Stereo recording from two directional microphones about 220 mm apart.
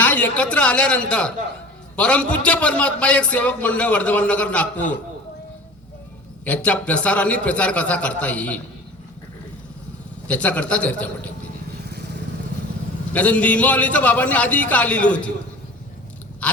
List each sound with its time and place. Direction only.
0.0 s a woman's voice: 5° left (ahead or behind)
6.4 s a man's voice: 5° left (ahead or behind)
10.2 s a man's voice: 5° left (ahead or behind)
11.9 s vehicle: 50° right (ahead or behind)
13.1 s a man's voice: 5° left (ahead or behind)
16.4 s chewing: 5° left (ahead or behind)